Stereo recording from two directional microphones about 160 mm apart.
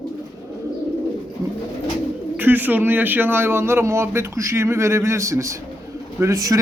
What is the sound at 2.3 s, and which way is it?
A man's voice, 10° right (ahead or behind).